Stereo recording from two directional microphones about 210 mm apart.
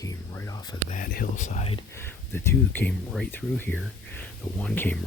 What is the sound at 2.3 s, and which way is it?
Speech, 10° left (ahead or behind).